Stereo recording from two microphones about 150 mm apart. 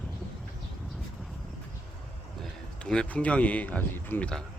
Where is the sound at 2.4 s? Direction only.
5° left (ahead or behind).